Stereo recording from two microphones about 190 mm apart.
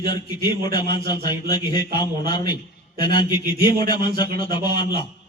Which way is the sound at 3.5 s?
55° right (ahead or behind).